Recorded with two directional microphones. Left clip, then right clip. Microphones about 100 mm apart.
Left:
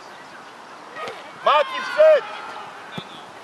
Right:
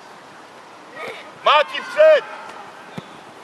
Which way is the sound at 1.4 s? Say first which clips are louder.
Right 2 dB; 15° right (ahead or behind).